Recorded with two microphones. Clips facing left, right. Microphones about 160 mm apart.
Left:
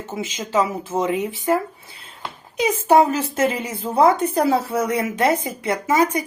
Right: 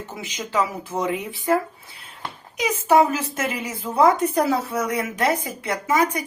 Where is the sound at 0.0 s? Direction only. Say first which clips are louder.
Left 4 dB; 20° left (ahead or behind).